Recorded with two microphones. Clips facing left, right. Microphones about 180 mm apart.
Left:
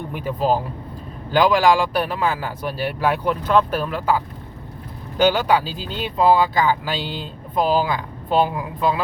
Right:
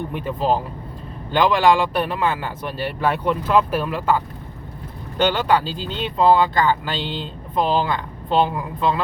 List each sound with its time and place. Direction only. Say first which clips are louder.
0.1 s speech: left 2 dB; 5° left (ahead or behind)